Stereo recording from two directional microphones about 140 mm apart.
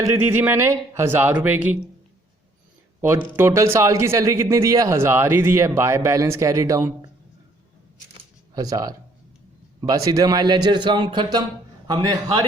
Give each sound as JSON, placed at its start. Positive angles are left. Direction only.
{"t": 0.0, "sound": "speech", "side_deg": -20}
{"t": 3.3, "sound": "speech", "side_deg": -20}
{"t": 8.5, "sound": "a man's voice", "side_deg": -25}